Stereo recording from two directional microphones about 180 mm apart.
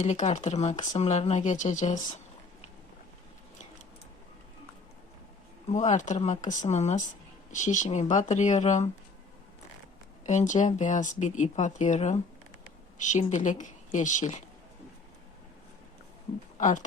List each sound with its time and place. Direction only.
0.0 s speech: 40° left (ahead or behind)
5.6 s speech: 40° left (ahead or behind)
10.2 s speech: 40° left (ahead or behind)
16.6 s speech: 45° left (ahead or behind)